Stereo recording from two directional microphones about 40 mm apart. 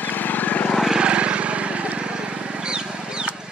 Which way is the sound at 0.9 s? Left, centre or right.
Right.